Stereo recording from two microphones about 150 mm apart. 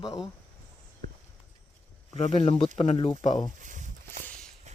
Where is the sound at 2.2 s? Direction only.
50° left (ahead or behind).